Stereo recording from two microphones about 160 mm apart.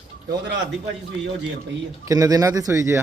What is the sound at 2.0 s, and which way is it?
Speech, 20° right (ahead or behind).